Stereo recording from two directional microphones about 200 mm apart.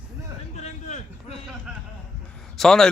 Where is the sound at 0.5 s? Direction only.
35° left (ahead or behind).